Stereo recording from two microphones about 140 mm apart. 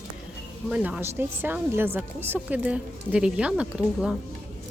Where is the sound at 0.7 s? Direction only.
10° right (ahead or behind).